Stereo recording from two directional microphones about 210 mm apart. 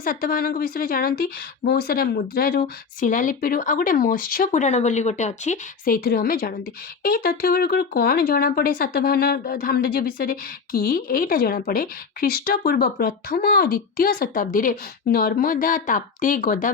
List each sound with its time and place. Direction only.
0.0 s speech: 45° left (ahead or behind)